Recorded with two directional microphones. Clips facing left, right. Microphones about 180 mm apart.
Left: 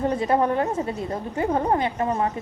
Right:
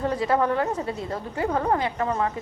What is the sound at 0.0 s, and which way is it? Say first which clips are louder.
A woman's voice: left 2 dB; 25° left (ahead or behind).